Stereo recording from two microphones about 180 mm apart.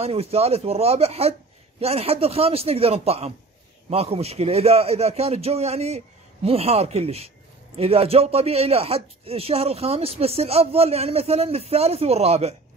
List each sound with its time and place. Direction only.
0.0 s speech: 35° right (ahead or behind)